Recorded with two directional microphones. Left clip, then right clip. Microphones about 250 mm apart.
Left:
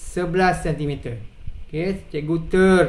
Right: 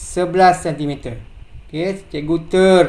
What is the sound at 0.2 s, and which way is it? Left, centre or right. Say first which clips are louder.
Speech: right 7 dB; centre.